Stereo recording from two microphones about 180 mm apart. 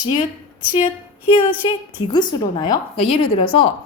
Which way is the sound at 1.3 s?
25° left (ahead or behind).